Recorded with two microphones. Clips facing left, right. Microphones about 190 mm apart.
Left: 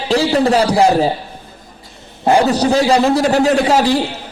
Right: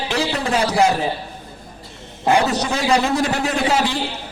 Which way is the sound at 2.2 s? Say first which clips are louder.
Left 5 dB; 35° left (ahead or behind).